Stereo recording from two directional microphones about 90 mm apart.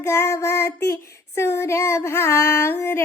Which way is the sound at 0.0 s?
30° left (ahead or behind).